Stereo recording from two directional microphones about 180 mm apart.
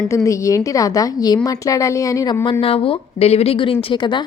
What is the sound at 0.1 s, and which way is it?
A woman's voice, 15° left (ahead or behind).